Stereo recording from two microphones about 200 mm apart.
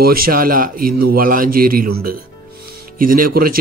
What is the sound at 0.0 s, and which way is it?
A man's voice, 45° right (ahead or behind).